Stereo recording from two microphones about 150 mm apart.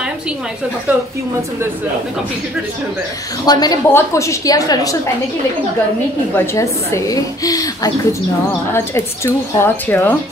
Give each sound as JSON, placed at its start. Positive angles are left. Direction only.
{"t": 3.4, "sound": "a woman's voice", "side_deg": 25}
{"t": 6.3, "sound": "a woman's voice", "side_deg": 20}